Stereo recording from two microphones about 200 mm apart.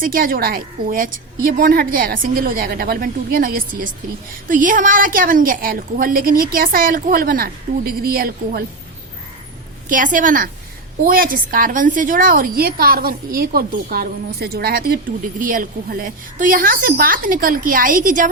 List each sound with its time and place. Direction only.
0.0 s a woman's voice: 45° right (ahead or behind)
9.9 s a woman's voice: 40° right (ahead or behind)